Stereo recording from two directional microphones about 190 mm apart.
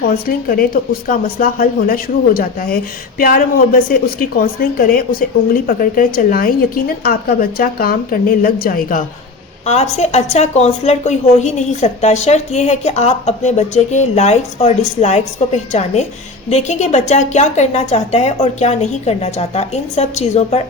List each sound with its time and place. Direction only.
0.0 s a woman's voice: 50° left (ahead or behind)
10.0 s a woman's voice: 35° left (ahead or behind)